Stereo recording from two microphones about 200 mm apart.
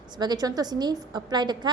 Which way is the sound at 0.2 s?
20° right (ahead or behind).